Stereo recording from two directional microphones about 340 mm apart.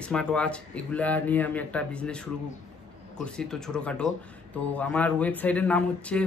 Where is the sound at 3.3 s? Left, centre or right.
Centre.